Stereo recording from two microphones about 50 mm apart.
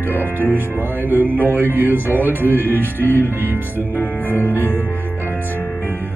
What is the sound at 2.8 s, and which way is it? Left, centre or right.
Music, left.